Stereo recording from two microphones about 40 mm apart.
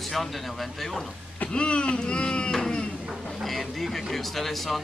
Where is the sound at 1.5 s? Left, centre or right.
Left.